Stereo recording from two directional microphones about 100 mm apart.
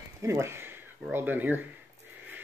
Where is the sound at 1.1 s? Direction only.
20° right (ahead or behind).